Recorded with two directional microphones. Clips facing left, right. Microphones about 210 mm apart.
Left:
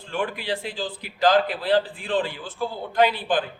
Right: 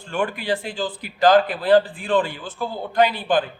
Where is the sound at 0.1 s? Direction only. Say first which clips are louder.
Right 4 dB; 50° right (ahead or behind).